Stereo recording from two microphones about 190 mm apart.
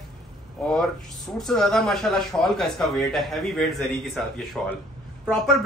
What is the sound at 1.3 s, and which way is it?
A man's voice, centre (ahead or behind).